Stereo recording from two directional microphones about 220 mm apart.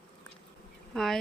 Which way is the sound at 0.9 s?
Centre (ahead or behind).